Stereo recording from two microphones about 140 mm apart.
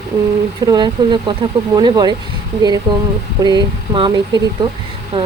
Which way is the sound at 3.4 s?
30° right (ahead or behind).